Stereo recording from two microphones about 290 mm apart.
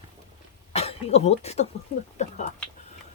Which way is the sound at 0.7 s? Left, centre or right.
Left.